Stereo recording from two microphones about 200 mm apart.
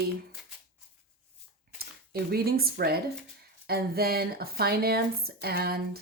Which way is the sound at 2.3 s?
50° right (ahead or behind).